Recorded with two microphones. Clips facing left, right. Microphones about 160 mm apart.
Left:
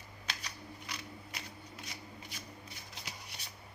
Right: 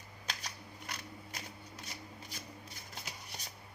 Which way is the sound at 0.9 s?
45° right (ahead or behind).